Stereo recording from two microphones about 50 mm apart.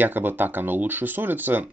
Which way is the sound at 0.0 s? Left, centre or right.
Right.